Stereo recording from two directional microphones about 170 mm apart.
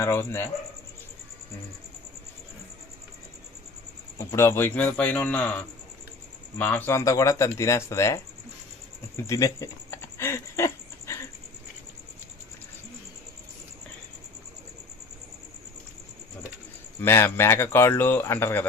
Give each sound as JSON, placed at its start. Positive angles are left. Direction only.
{"t": 0.0, "sound": "speech", "side_deg": 15}
{"t": 4.2, "sound": "speech", "side_deg": 15}
{"t": 9.2, "sound": "a sound", "side_deg": 20}
{"t": 17.0, "sound": "speech", "side_deg": 15}